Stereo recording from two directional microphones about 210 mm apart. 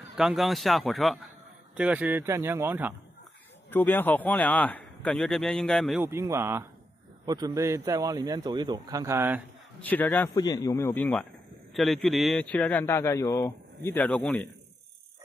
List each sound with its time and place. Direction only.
0.2 s a man's voice: centre (ahead or behind)
3.7 s a man's voice: 10° left (ahead or behind)
6.0 s a man's voice: 15° right (ahead or behind)
9.8 s a man's voice: 10° left (ahead or behind)
11.7 s a man's voice: centre (ahead or behind)